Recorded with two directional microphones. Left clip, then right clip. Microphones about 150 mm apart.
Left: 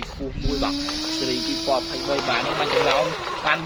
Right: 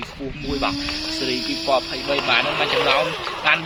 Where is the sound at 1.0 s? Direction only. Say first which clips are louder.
Right 1 dB; 50° left (ahead or behind).